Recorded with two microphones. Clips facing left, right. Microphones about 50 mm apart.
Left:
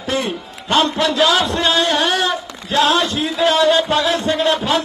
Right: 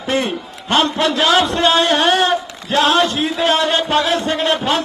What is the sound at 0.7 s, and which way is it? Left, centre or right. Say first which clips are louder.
Chant: even; right.